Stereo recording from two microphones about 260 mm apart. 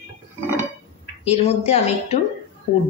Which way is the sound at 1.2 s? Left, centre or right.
Left.